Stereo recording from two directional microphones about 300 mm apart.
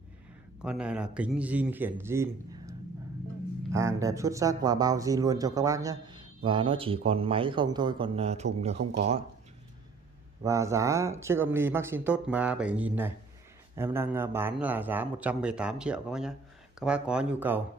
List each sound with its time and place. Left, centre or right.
0.6 s speech: centre
3.7 s speech: centre
10.4 s speech: centre